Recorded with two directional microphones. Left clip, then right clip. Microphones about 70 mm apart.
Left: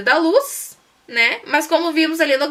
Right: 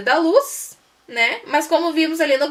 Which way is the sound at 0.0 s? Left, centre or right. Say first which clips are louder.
Left 1 dB; left.